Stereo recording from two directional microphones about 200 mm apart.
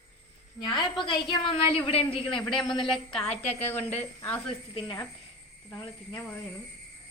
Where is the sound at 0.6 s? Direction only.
25° left (ahead or behind).